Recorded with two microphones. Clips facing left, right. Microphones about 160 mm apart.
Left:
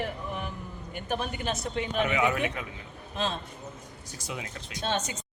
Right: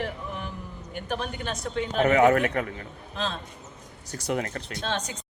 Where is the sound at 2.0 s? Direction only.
50° right (ahead or behind).